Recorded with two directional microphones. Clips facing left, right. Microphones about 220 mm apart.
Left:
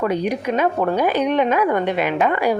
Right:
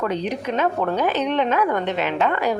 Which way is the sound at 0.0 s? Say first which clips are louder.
Left 3 dB; 10° left (ahead or behind).